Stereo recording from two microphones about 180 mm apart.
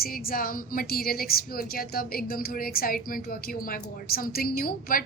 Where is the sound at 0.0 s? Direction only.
55° left (ahead or behind).